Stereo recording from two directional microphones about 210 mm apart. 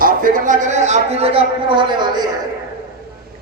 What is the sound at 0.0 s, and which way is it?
A man's voice, 40° right (ahead or behind).